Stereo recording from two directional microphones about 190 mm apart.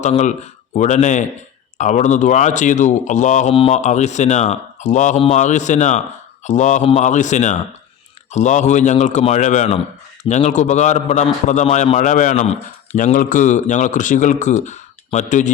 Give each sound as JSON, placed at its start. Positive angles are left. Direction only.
{"t": 0.0, "sound": "a man's voice", "side_deg": 40}